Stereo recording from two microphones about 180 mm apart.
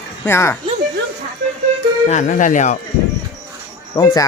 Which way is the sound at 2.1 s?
45° left (ahead or behind).